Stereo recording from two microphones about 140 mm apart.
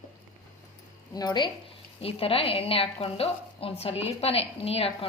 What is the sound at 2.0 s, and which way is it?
A woman's voice, 40° left (ahead or behind).